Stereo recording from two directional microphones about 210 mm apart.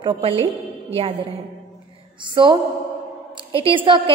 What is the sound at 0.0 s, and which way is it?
Speech, 25° right (ahead or behind).